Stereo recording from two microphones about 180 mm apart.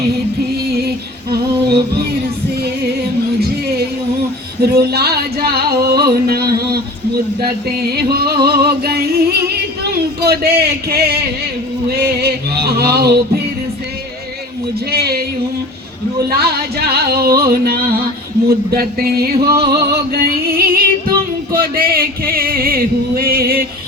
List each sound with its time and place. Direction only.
0.9 s female singing: 60° right (ahead or behind)
4.6 s singing: 60° right (ahead or behind)
14.8 s a sound: 60° right (ahead or behind)
16.3 s music: 60° right (ahead or behind)